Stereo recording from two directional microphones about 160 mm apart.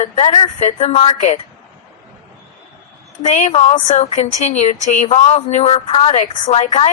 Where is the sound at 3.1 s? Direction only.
50° left (ahead or behind); by 6.5 s 30° left (ahead or behind).